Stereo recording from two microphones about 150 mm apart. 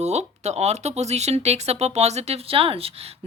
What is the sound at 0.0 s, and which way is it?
Speech, 50° right (ahead or behind).